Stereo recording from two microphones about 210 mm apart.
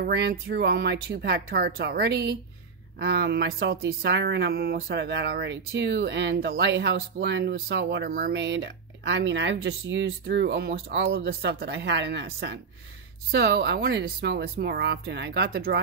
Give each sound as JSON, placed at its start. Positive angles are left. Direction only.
{"t": 0.0, "sound": "speech", "side_deg": -50}